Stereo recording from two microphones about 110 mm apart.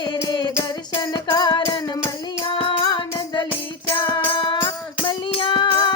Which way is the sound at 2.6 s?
45° left (ahead or behind).